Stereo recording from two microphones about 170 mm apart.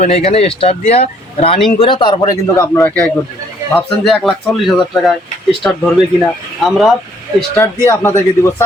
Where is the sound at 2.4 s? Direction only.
15° left (ahead or behind); by 6.9 s centre (ahead or behind).